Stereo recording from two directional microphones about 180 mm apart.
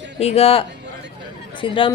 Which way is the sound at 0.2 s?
35° left (ahead or behind).